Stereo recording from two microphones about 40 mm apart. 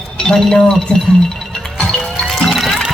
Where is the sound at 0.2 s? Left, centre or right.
Centre.